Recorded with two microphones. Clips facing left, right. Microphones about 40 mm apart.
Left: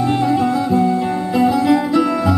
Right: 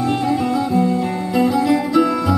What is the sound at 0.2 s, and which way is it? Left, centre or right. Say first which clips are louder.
Music: left 2 dB; centre.